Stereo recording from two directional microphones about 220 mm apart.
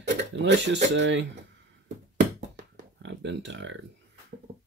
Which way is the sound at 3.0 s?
55° right (ahead or behind).